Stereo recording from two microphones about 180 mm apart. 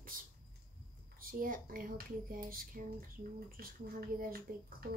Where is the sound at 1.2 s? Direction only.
50° right (ahead or behind).